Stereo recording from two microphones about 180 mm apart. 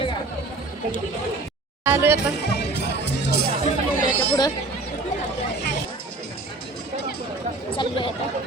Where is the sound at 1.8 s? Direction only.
10° right (ahead or behind).